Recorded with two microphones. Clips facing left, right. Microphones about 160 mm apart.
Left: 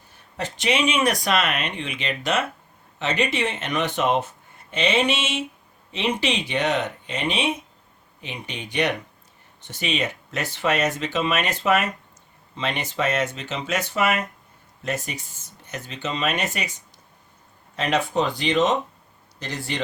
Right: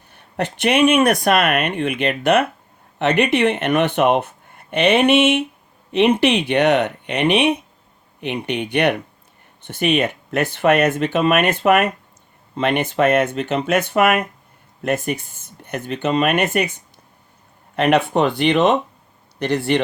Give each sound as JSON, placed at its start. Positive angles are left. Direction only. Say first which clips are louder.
{"t": 0.1, "sound": "speech", "louder": "right 7 dB", "side_deg": -65}